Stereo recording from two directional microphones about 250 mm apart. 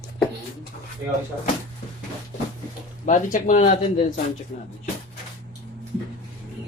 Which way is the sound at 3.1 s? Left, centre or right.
Left.